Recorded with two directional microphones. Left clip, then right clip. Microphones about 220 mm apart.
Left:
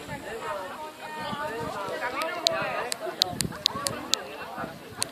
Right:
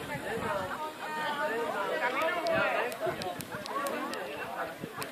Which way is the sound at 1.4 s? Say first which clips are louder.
Right 1 dB; 40° right (ahead or behind).